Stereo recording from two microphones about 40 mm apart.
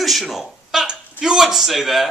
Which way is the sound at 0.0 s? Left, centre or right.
Centre.